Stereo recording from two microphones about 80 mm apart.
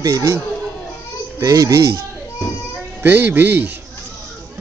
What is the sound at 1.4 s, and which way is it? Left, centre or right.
Speech, right.